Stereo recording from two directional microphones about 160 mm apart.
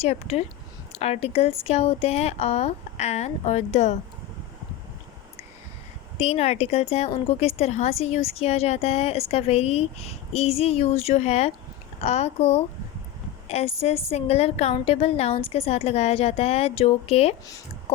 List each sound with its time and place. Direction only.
0.0 s speech: 40° left (ahead or behind)
6.1 s a woman's voice: 40° left (ahead or behind)